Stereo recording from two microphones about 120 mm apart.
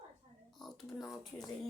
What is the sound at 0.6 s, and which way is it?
Speech, centre (ahead or behind).